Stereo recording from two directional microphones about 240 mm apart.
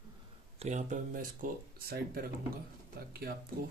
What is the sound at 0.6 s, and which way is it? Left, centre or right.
Speech, right.